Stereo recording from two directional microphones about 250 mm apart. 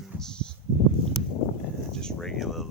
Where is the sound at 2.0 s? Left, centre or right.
Centre.